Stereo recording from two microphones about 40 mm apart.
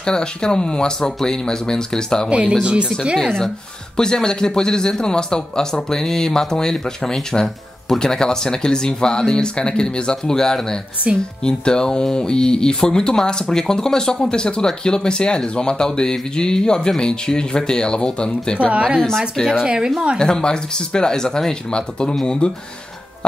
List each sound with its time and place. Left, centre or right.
0.0 s speech: centre
2.2 s a woman's voice: right
3.9 s a man's voice: centre
18.7 s a woman's voice: right
19.0 s a man's voice: centre
19.6 s a woman's voice: centre
20.2 s speech: centre